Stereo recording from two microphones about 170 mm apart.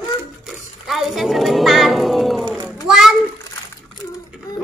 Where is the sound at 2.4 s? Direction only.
20° right (ahead or behind).